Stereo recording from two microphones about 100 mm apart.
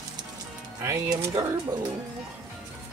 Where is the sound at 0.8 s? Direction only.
30° right (ahead or behind).